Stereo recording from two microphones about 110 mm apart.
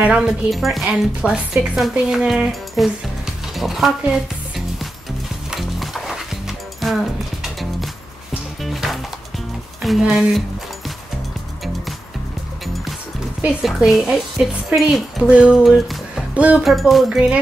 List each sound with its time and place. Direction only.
0.0 s speech: 5° right (ahead or behind)
5.5 s music: centre (ahead or behind)
9.8 s speech: centre (ahead or behind)
13.4 s speech: 5° right (ahead or behind)
15.2 s a sound: 10° right (ahead or behind)
15.5 s speech: centre (ahead or behind)